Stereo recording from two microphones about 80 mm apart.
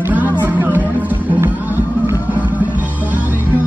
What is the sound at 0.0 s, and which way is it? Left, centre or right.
Music, right.